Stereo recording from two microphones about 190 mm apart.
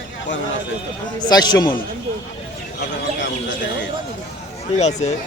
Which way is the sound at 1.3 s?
20° left (ahead or behind).